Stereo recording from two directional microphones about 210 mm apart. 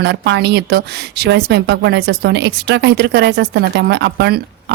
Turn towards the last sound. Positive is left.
turn(degrees=-50)  # may be behind; listen again after turning